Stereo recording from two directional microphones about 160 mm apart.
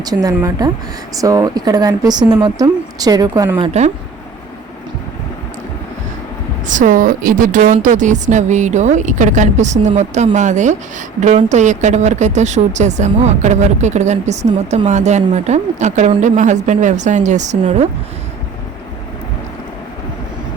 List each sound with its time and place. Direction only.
0.0 s speech: 25° right (ahead or behind)
3.6 s a woman's voice: 45° right (ahead or behind)
6.7 s a woman's voice: 50° right (ahead or behind)